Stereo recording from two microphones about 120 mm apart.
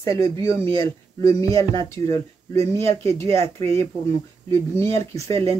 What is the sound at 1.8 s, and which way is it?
Speech, 25° left (ahead or behind).